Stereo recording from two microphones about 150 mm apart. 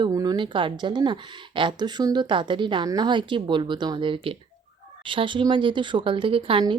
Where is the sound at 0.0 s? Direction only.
25° right (ahead or behind).